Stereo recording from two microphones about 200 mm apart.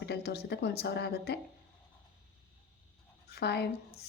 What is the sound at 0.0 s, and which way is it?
A woman's voice, 55° left (ahead or behind).